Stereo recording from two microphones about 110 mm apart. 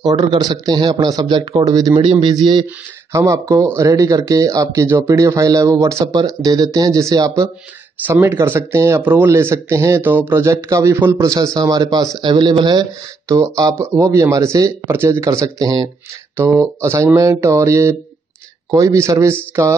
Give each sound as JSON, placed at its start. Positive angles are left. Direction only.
{"t": 0.4, "sound": "a man's voice", "side_deg": -40}
{"t": 3.1, "sound": "speech", "side_deg": -30}
{"t": 16.3, "sound": "speech", "side_deg": -20}